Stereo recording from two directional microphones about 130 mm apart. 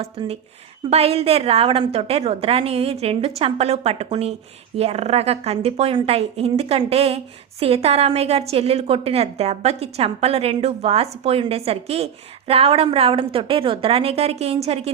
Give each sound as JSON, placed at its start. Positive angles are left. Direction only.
{"t": 0.0, "sound": "a woman's voice", "side_deg": -50}